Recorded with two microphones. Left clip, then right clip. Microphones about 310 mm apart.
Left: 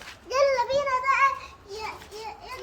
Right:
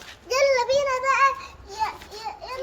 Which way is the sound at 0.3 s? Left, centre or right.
Right.